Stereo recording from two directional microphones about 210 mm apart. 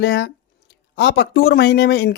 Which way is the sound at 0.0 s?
55° left (ahead or behind).